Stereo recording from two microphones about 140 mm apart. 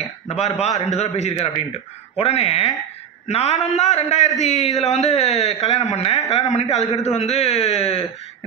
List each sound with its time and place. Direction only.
0.6 s a man's voice: 50° left (ahead or behind)